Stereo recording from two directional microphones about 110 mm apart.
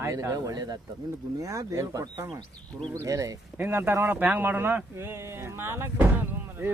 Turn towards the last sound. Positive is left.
turn(degrees=-20)  # may be behind; listen again after turning